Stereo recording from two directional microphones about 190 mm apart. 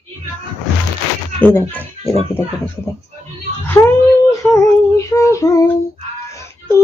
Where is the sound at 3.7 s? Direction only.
10° left (ahead or behind).